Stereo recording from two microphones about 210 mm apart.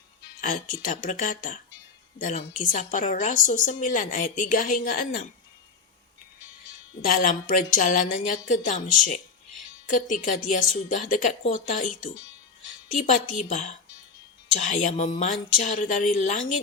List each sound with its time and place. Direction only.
0.4 s a woman's voice: 40° left (ahead or behind)
7.0 s a woman's voice: 40° left (ahead or behind)